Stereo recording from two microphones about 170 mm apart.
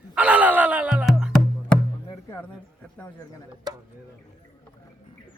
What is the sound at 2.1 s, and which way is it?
Speech, 15° left (ahead or behind).